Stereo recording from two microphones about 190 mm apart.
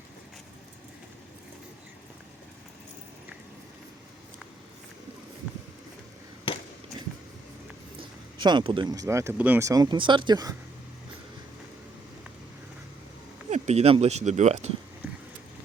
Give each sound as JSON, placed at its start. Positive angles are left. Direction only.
{"t": 8.4, "sound": "speech", "side_deg": -25}
{"t": 13.5, "sound": "speech", "side_deg": -35}